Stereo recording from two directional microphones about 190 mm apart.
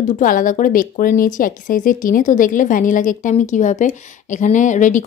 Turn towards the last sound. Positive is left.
turn(degrees=40)  # may be behind; listen again after turning